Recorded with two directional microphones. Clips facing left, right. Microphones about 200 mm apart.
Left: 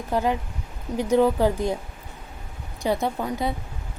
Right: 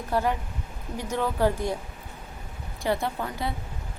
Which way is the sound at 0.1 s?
15° left (ahead or behind).